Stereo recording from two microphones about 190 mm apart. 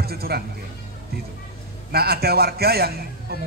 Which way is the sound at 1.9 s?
55° right (ahead or behind).